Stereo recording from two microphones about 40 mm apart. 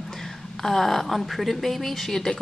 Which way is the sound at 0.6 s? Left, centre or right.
Centre.